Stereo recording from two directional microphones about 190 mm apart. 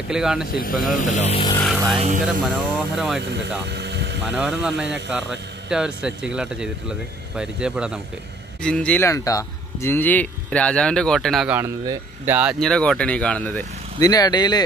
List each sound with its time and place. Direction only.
0.1 s speech: 5° right (ahead or behind)
0.5 s speech: 50° left (ahead or behind)
2.0 s speech: 40° right (ahead or behind)
2.4 s speech: centre (ahead or behind)
3.2 s speech: 65° right (ahead or behind)
4.3 s speech: 5° right (ahead or behind)
4.8 s speech: 65° right (ahead or behind)
5.7 s speech: 5° right (ahead or behind)
11.8 s speech: 20° right (ahead or behind)
12.4 s speech: centre (ahead or behind)
14.0 s speech: 20° left (ahead or behind)